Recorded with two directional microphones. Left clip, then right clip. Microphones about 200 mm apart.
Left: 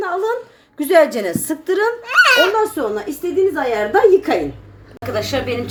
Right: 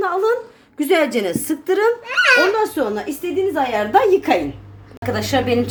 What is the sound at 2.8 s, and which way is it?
Speech, 30° right (ahead or behind).